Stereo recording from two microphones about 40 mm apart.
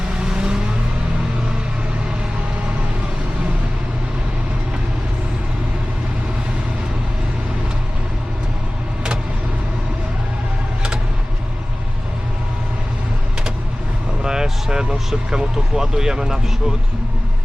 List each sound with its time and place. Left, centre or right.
0.3 s vehicle: centre
14.3 s speech: centre